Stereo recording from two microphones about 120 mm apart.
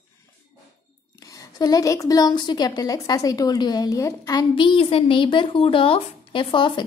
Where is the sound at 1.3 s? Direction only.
30° left (ahead or behind).